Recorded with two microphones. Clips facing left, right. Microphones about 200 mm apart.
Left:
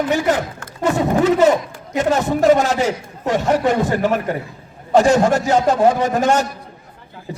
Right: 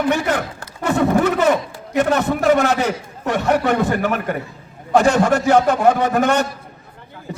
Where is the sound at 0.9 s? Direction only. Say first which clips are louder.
Left 1 dB; 60° right (ahead or behind).